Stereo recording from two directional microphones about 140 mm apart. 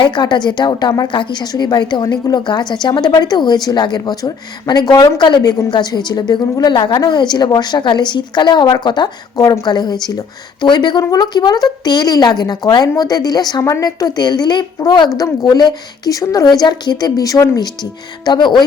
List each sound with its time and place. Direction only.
0.0 s a woman's voice: 30° left (ahead or behind)